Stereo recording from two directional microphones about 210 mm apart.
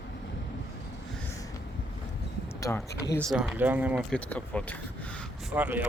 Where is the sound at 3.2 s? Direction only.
Centre (ahead or behind).